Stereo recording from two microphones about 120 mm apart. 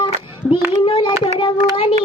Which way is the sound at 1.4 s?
45° left (ahead or behind).